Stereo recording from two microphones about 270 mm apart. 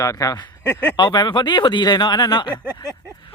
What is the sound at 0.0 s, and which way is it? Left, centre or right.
Speech, centre.